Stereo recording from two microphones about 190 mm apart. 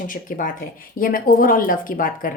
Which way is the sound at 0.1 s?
45° left (ahead or behind).